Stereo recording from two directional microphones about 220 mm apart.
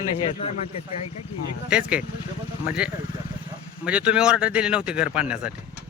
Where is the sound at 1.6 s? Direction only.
5° right (ahead or behind).